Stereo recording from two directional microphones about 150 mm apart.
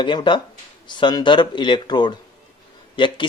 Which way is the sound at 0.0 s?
30° left (ahead or behind).